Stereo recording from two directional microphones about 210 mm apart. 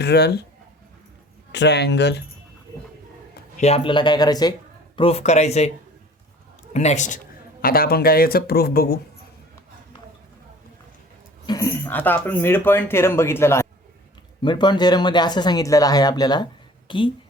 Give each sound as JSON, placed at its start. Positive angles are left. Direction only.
{"t": 0.0, "sound": "speech", "side_deg": 50}
{"t": 1.5, "sound": "speech", "side_deg": 55}
{"t": 3.6, "sound": "speech", "side_deg": 25}
{"t": 6.7, "sound": "speech", "side_deg": 35}
{"t": 7.6, "sound": "speech", "side_deg": 45}
{"t": 11.4, "sound": "speech", "side_deg": 15}